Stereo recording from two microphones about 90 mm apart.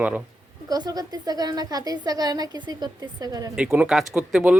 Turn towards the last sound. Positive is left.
turn(degrees=-10)  # may be behind; listen again after turning